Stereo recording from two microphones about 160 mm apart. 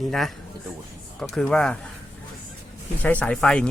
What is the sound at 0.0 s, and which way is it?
Speech, centre (ahead or behind).